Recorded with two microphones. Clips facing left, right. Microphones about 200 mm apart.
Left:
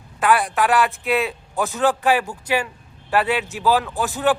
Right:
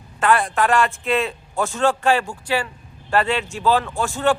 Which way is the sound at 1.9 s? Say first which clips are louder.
Even; 15° left (ahead or behind).